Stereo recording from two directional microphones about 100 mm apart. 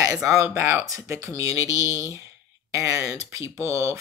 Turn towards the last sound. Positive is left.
turn(degrees=-30)  # may be behind; listen again after turning